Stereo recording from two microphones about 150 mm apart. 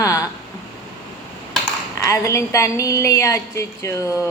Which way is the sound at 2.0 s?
20° left (ahead or behind).